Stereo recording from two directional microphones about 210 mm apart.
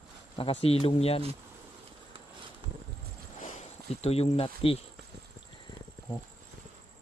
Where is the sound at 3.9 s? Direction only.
30° left (ahead or behind).